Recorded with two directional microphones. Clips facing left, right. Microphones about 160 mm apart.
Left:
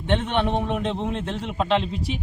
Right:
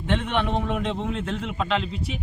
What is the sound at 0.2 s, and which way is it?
Speech, 30° left (ahead or behind).